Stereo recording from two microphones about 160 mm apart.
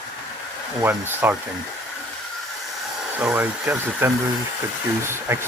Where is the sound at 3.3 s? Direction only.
15° right (ahead or behind).